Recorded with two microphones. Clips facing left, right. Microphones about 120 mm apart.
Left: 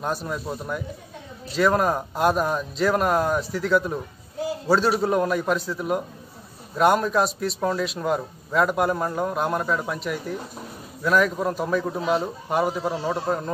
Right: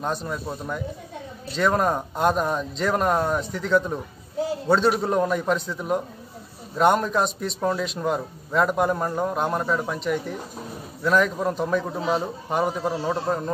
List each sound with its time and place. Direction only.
0.0 s a man's voice: 5° left (ahead or behind)